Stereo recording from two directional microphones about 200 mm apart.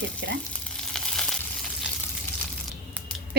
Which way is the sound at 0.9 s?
5° left (ahead or behind).